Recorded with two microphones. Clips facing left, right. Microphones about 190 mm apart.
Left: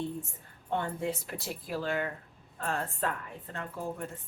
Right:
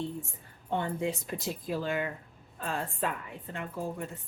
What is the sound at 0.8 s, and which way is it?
A woman's voice, 15° right (ahead or behind).